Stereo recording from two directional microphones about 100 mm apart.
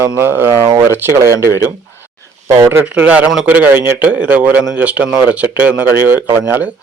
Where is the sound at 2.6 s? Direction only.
20° right (ahead or behind).